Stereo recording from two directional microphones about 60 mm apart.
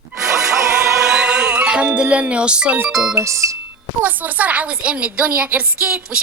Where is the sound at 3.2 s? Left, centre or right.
Right.